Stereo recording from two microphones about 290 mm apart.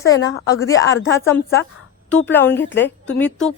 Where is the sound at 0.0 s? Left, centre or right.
Centre.